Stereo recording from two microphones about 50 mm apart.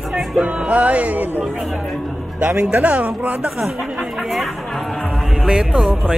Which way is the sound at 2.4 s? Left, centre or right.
Right.